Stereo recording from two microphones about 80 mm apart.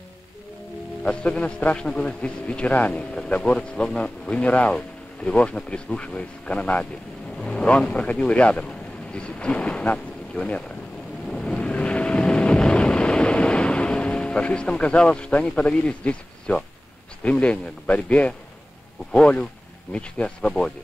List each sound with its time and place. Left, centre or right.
1.0 s a man's voice: centre
11.2 s vehicle: centre
17.2 s a man's voice: centre